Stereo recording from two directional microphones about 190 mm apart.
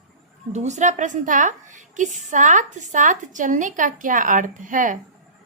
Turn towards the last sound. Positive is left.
turn(degrees=-45)  # may be behind; listen again after turning